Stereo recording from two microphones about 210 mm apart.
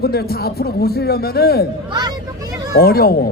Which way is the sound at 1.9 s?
20° right (ahead or behind).